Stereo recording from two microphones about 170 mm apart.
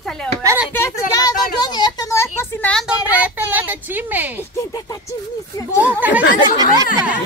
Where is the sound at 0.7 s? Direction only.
20° left (ahead or behind).